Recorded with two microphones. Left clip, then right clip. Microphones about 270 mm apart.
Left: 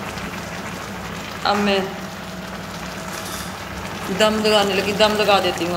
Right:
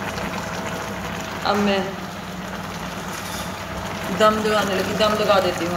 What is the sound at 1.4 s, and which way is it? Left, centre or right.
Speech, centre.